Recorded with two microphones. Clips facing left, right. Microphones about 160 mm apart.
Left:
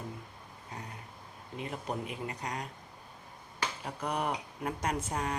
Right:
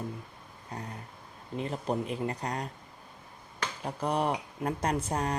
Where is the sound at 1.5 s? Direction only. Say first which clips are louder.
Right 5 dB; 35° right (ahead or behind).